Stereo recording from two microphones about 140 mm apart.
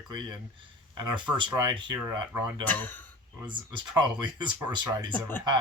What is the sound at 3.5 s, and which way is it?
Speech, 35° right (ahead or behind).